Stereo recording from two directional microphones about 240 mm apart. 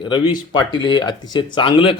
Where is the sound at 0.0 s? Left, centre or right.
Centre.